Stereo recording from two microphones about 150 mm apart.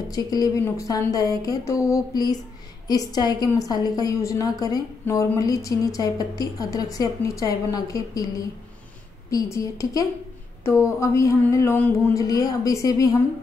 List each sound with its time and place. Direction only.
0.1 s a woman's voice: 25° left (ahead or behind)